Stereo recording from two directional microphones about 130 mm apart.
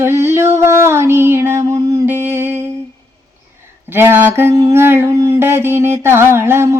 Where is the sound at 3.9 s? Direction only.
15° right (ahead or behind).